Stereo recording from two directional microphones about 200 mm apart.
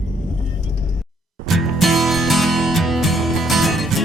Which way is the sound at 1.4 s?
Centre (ahead or behind).